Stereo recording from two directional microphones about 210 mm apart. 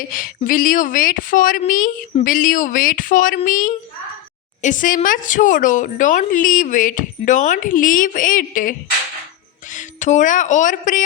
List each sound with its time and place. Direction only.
0.1 s a woman's voice: 40° left (ahead or behind)